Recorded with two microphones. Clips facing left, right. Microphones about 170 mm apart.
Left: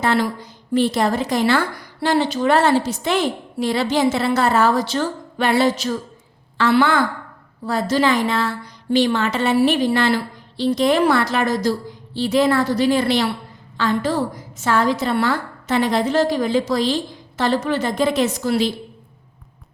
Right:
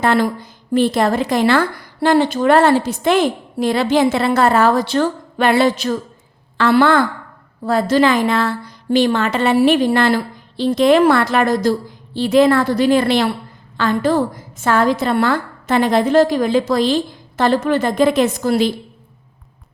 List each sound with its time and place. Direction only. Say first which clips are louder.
0.0 s a woman's voice: right 3 dB; 55° right (ahead or behind)